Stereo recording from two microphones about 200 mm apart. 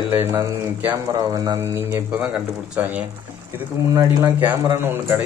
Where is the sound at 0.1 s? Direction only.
10° right (ahead or behind).